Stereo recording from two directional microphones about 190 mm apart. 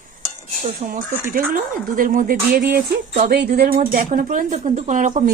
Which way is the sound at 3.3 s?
55° right (ahead or behind).